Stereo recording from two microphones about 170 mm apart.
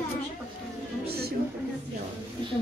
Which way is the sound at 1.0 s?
65° right (ahead or behind).